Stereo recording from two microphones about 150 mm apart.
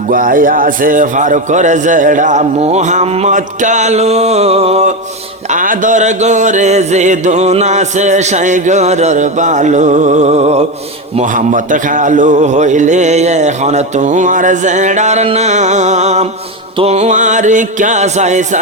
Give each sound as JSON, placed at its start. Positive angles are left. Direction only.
{"t": 0.1, "sound": "a man's voice", "side_deg": -65}
{"t": 5.5, "sound": "a man's voice", "side_deg": -60}
{"t": 11.1, "sound": "a man's voice", "side_deg": -55}